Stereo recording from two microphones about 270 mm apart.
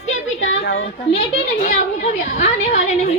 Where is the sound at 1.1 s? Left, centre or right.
Left.